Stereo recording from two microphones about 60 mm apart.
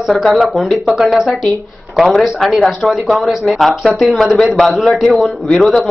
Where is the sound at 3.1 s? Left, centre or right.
Centre.